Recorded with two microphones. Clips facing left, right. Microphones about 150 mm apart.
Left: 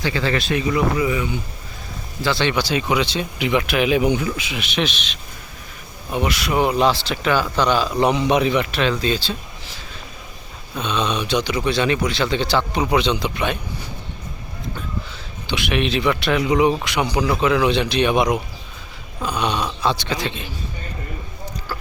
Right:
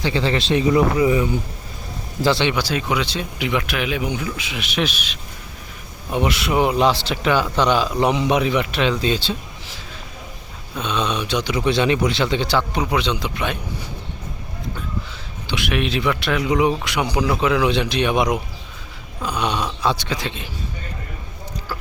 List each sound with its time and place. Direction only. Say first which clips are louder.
0.0 s speech: right 1 dB; 25° right (ahead or behind)
2.4 s speech: left 1 dB; 10° right (ahead or behind); by 4.4 s 15° left (ahead or behind)
4.7 s speech: even; 5° right (ahead or behind)
6.1 s speech: right 1 dB; 20° right (ahead or behind)
8.3 s speech: left 1 dB; 5° right (ahead or behind)
8.7 s speech: even; 15° right (ahead or behind)
10.8 s speech: even; centre (ahead or behind)
15.4 s speech: left 1 dB; centre (ahead or behind)